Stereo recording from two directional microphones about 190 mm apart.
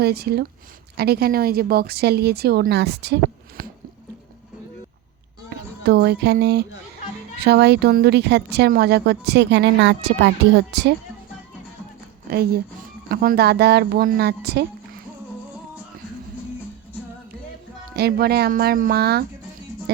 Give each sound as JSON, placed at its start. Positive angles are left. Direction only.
{"t": 0.0, "sound": "speech", "side_deg": -55}
{"t": 3.6, "sound": "squish", "side_deg": -50}
{"t": 5.5, "sound": "speech", "side_deg": -55}
{"t": 12.3, "sound": "speech", "side_deg": -55}
{"t": 17.9, "sound": "speech", "side_deg": -55}